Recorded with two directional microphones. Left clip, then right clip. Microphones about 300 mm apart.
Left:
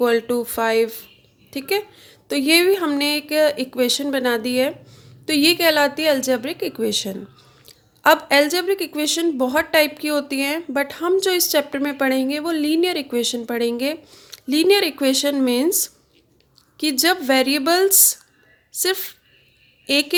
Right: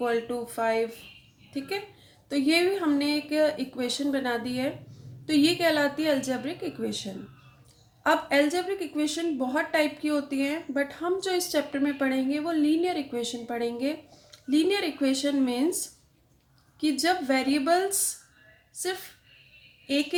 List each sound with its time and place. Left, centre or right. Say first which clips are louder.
0.0 s a woman's voice: left 9 dB; left